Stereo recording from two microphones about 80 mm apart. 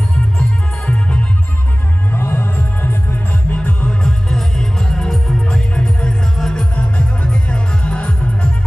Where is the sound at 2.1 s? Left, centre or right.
Left.